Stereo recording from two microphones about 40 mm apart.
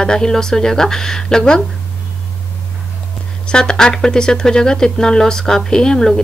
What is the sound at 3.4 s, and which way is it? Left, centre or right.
Speech, centre.